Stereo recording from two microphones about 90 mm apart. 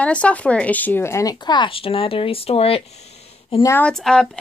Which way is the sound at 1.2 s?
50° left (ahead or behind).